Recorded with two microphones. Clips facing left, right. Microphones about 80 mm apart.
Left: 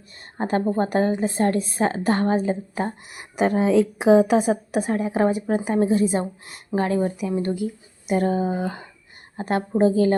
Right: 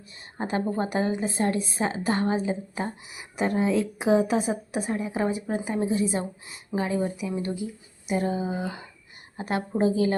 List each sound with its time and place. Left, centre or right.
0.3 s a woman's voice: left
3.4 s a woman's voice: left